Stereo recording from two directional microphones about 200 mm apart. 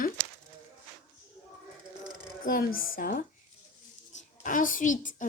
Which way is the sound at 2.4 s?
45° left (ahead or behind).